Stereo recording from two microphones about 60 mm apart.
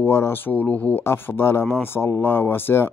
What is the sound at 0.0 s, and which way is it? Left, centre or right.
Speech, left.